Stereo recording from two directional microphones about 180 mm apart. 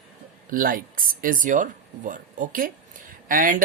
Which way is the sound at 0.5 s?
50° right (ahead or behind).